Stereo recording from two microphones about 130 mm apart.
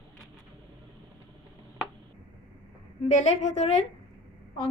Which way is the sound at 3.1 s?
60° left (ahead or behind).